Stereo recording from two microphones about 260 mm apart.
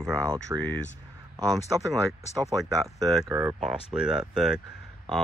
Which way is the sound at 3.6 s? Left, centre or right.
Centre.